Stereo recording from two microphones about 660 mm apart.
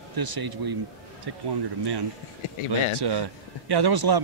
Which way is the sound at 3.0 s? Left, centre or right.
Right.